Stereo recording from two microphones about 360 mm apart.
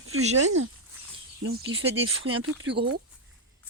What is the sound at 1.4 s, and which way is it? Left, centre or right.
Speech, right.